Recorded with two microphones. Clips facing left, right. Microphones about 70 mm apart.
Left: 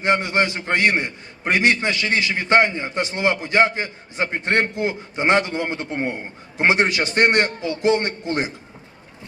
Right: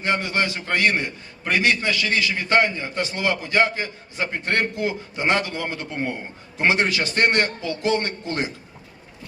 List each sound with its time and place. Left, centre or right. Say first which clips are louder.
0.0 s a man's voice: left 4 dB; left